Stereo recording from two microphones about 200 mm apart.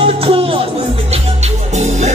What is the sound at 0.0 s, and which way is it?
Music, 30° right (ahead or behind).